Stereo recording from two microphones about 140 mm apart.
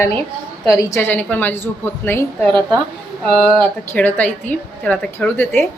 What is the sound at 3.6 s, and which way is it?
A woman's voice, 10° left (ahead or behind).